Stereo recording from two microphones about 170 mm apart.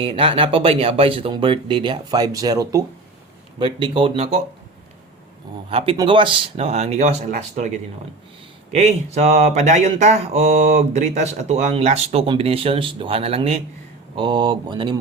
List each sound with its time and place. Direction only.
0.0 s speech: 30° right (ahead or behind)
5.7 s speech: 35° right (ahead or behind)
8.7 s speech: 40° right (ahead or behind); by 14.9 s 25° right (ahead or behind)